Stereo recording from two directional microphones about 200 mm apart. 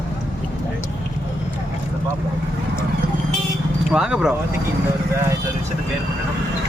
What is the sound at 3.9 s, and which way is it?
Speech, 5° right (ahead or behind).